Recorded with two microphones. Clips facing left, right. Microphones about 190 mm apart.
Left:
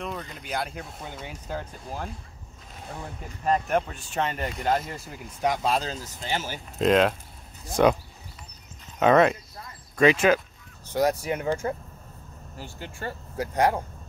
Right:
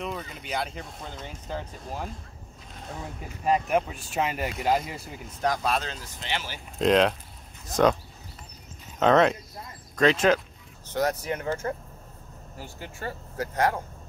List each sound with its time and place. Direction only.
0.0 s speech: centre (ahead or behind)
5.4 s speech: 20° left (ahead or behind); by 6.6 s 45° left (ahead or behind)
6.8 s speech: centre (ahead or behind)
9.0 s speech: 5° left (ahead or behind)
12.5 s speech: 5° right (ahead or behind)
13.4 s speech: 15° left (ahead or behind)